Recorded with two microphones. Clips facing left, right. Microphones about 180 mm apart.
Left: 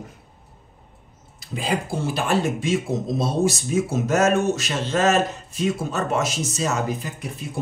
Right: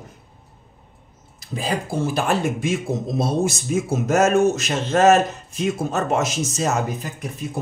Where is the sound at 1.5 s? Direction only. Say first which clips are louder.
Right 1 dB; 40° right (ahead or behind).